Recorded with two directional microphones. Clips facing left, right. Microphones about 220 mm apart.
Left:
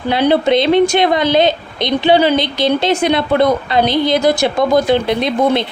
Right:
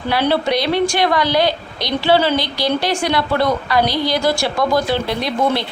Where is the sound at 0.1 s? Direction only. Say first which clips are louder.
Left 5 dB; 20° left (ahead or behind).